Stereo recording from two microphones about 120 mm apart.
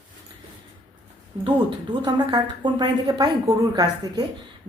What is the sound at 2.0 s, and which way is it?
A woman's voice, 40° right (ahead or behind).